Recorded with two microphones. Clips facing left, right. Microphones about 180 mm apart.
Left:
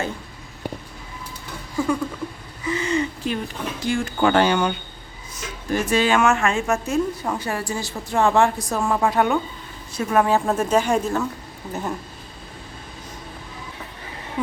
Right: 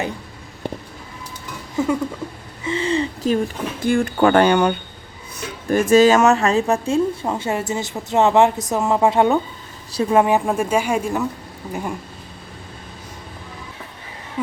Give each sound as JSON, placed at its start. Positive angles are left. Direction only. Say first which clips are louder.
{"t": 1.8, "sound": "a sound", "louder": "right 2 dB", "side_deg": -20}
{"t": 3.8, "sound": "speech", "louder": "right 5 dB", "side_deg": -55}
{"t": 5.4, "sound": "speech", "louder": "right 5 dB", "side_deg": -45}